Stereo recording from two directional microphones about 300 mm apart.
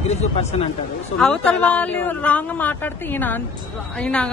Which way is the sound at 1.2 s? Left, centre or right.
Centre.